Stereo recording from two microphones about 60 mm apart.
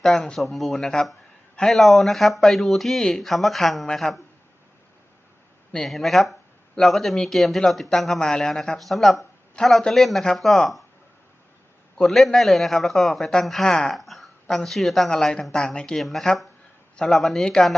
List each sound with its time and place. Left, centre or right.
0.0 s speech: centre
5.7 s speech: centre
12.0 s speech: centre
16.0 s speech: centre